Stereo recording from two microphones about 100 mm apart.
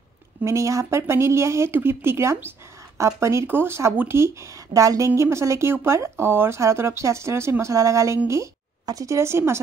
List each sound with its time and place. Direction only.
0.4 s speech: 30° right (ahead or behind)